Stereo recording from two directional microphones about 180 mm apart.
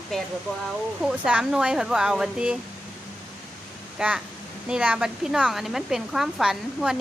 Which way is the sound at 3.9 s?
5° right (ahead or behind).